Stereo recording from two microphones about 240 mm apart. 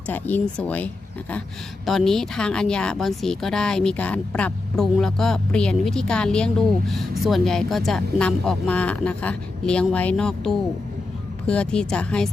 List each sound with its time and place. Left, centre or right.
0.1 s speech: centre